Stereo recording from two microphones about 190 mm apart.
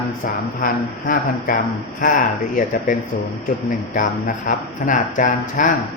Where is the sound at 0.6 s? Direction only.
45° left (ahead or behind).